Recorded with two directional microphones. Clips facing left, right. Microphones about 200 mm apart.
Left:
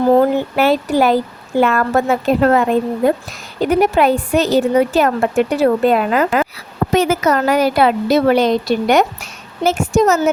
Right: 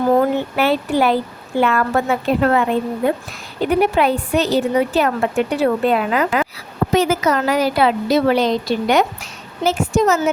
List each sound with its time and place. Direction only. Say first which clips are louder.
0.2 s a woman's voice: left 3 dB; 40° left (ahead or behind)